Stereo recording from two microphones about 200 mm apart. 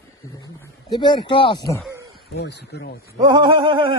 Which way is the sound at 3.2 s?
15° right (ahead or behind).